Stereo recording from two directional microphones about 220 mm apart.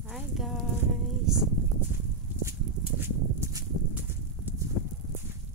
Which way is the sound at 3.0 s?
10° right (ahead or behind).